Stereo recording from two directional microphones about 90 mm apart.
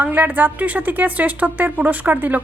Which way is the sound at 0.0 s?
20° right (ahead or behind).